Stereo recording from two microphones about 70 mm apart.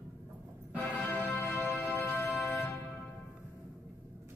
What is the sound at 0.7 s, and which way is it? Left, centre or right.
Music, left.